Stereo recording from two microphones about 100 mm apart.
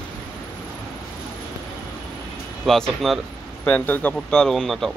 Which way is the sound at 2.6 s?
5° left (ahead or behind).